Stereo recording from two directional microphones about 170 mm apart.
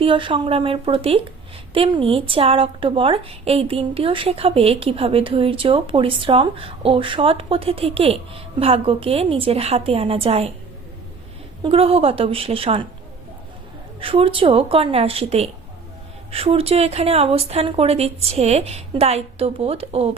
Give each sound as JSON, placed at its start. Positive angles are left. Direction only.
{"t": 0.0, "sound": "speech", "side_deg": -30}
{"t": 11.6, "sound": "speech", "side_deg": -35}
{"t": 14.0, "sound": "speech", "side_deg": -30}